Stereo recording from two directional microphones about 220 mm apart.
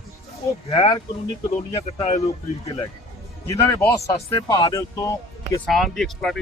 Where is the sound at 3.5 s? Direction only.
15° left (ahead or behind).